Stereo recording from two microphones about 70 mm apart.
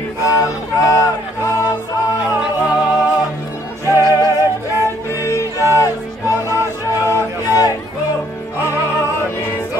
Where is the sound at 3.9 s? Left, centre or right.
Left.